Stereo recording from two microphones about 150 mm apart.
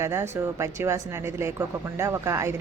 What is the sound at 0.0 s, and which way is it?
Speech, 15° right (ahead or behind).